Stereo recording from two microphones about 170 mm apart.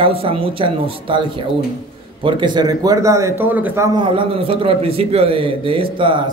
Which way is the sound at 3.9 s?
30° right (ahead or behind).